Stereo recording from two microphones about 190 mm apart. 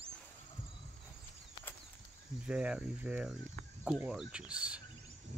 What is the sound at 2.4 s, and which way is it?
Speech, 5° right (ahead or behind).